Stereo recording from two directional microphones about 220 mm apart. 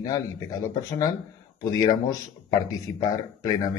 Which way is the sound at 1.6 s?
15° left (ahead or behind).